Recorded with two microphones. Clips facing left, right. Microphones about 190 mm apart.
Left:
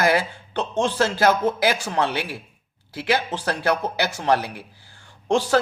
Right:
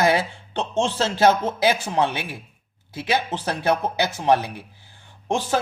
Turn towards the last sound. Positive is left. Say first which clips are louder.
# left 4 dB
turn(degrees=-20)  # may be behind; listen again after turning